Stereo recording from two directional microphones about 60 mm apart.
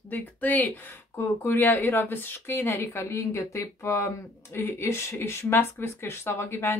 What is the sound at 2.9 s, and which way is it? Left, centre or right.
Speech, left.